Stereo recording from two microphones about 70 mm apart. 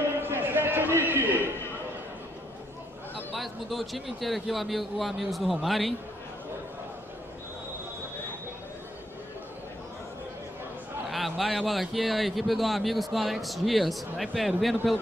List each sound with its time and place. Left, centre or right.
0.2 s a sound: right
3.3 s a man's voice: centre
11.1 s a man's voice: centre